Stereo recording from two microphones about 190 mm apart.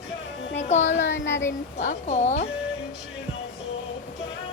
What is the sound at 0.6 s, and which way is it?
Music, 40° left (ahead or behind).